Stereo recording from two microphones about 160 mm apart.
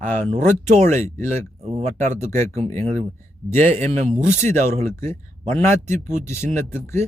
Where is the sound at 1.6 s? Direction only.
40° right (ahead or behind).